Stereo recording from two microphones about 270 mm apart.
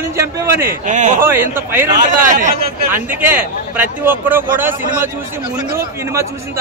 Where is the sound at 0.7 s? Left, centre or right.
Right.